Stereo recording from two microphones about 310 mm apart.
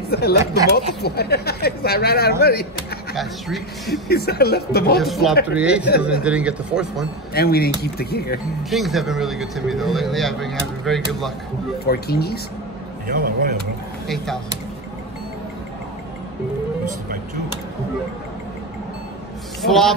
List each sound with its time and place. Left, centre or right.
0.1 s speech: left
3.2 s speech: centre
4.1 s speech: left
5.0 s speech: centre
7.3 s speech: left
8.6 s speech: centre
11.8 s speech: left
13.0 s speech: right
14.0 s speech: centre
19.6 s speech: centre